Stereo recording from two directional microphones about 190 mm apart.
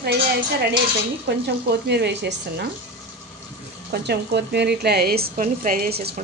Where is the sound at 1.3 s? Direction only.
65° right (ahead or behind).